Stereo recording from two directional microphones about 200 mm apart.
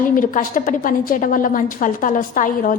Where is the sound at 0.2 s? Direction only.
40° left (ahead or behind).